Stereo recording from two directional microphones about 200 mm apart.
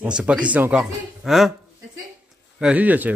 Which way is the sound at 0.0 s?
5° right (ahead or behind).